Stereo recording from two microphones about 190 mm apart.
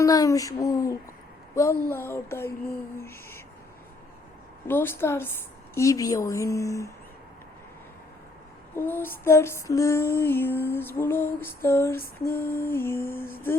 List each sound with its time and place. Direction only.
0.0 s a woman's voice: 20° left (ahead or behind)
4.7 s a woman's voice: 10° left (ahead or behind)
8.7 s a woman's voice: 10° left (ahead or behind)